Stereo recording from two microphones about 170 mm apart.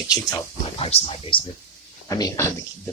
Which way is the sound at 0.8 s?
35° left (ahead or behind).